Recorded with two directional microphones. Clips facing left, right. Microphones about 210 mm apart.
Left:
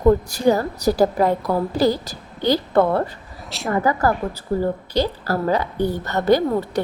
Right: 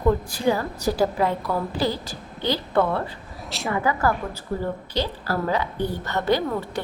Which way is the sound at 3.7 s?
40° left (ahead or behind).